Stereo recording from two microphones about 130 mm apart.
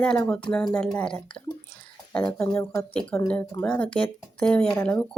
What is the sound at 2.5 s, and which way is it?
Speech, 20° left (ahead or behind).